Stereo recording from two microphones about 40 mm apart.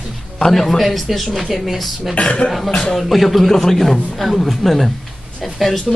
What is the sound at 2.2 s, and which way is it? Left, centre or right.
Speech, left.